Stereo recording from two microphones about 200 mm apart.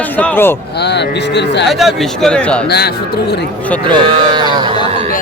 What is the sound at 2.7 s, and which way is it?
Speech, 55° left (ahead or behind).